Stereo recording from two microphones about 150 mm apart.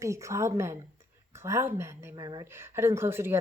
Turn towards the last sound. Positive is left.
turn(degrees=-15)  # may be behind; listen again after turning